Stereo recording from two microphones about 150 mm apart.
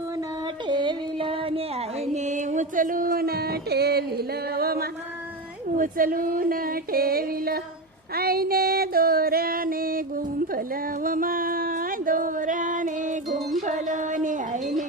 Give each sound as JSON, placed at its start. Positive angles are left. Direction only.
{"t": 0.7, "sound": "music", "side_deg": -30}
{"t": 5.7, "sound": "a sound", "side_deg": -65}
{"t": 8.1, "sound": "female singing", "side_deg": -90}
{"t": 13.6, "sound": "music", "side_deg": -55}